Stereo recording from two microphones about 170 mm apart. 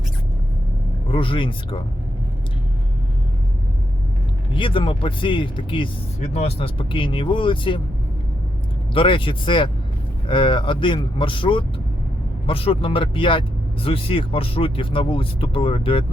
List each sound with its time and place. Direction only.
1.0 s speech: 30° left (ahead or behind)
4.5 s speech: 30° left (ahead or behind)
8.9 s speech: 30° left (ahead or behind)